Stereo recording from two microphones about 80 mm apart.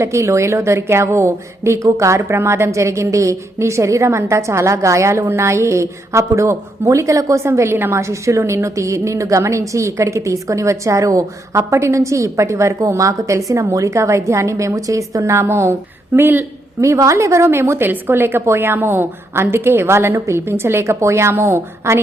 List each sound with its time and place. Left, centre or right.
0.0 s a woman's voice: right
16.8 s a woman's voice: right